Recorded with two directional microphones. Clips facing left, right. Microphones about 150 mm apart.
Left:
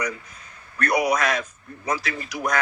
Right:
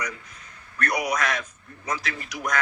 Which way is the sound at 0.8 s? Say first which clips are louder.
Left 4 dB; 30° left (ahead or behind).